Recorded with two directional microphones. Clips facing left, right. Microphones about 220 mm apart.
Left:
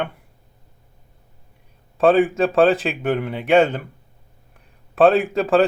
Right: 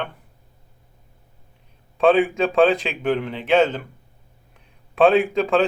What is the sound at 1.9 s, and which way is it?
A man's voice, 5° left (ahead or behind).